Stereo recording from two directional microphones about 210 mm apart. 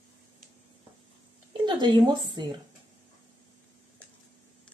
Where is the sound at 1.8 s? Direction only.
20° right (ahead or behind).